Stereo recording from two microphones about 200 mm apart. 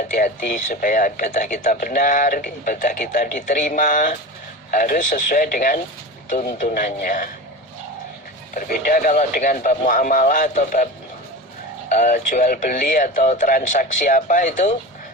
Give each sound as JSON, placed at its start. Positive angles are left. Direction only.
{"t": 0.2, "sound": "speech", "side_deg": 40}
{"t": 8.5, "sound": "a man's voice", "side_deg": 45}
{"t": 11.9, "sound": "speech", "side_deg": 40}